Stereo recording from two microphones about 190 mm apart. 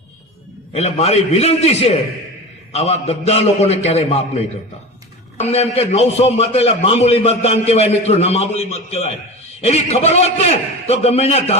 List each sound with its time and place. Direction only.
0.7 s a man's voice: 35° left (ahead or behind)